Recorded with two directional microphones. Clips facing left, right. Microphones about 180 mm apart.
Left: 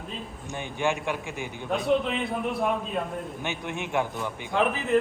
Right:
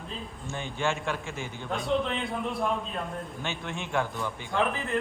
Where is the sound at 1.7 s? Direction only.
Centre (ahead or behind).